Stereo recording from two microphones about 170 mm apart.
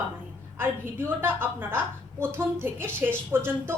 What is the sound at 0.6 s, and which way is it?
A woman's voice, 10° right (ahead or behind).